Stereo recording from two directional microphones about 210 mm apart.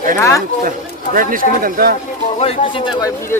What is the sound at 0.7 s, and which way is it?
Speech, 40° right (ahead or behind).